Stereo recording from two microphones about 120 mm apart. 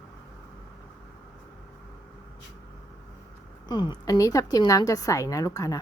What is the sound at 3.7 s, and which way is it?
A woman's voice, 40° left (ahead or behind).